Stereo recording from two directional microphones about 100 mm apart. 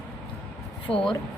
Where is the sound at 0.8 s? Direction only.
5° left (ahead or behind).